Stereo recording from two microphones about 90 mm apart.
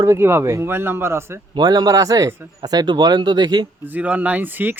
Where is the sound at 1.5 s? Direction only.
50° right (ahead or behind).